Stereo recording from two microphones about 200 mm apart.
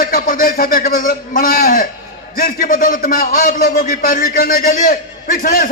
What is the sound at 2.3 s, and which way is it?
A man's voice, 45° left (ahead or behind).